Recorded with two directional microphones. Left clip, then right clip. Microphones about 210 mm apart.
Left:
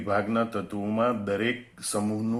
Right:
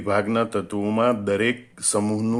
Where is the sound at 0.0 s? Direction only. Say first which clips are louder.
Right 4 dB; 35° right (ahead or behind).